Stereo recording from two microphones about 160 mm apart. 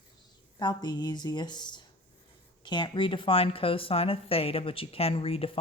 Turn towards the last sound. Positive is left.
turn(degrees=35)  # may be behind; listen again after turning